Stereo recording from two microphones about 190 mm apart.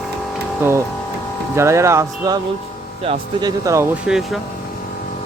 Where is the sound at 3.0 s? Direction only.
30° right (ahead or behind).